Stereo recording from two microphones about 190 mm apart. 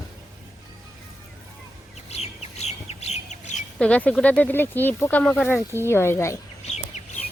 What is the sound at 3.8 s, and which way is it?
Speech, 5° left (ahead or behind).